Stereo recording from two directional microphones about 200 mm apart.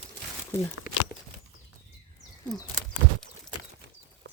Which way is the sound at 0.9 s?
50° left (ahead or behind).